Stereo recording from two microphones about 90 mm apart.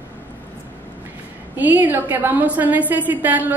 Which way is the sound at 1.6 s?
20° right (ahead or behind).